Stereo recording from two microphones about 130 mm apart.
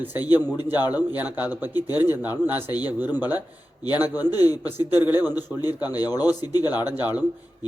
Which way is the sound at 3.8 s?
30° left (ahead or behind).